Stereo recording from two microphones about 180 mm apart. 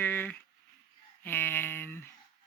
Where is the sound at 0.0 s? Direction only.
10° left (ahead or behind).